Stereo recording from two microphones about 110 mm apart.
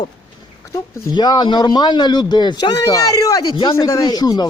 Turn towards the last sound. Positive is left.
turn(degrees=35)  # may be behind; listen again after turning